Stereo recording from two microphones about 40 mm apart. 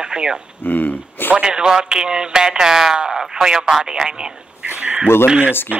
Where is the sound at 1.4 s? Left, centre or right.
Centre.